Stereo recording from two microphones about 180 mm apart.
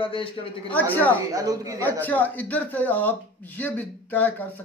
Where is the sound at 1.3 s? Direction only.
20° right (ahead or behind).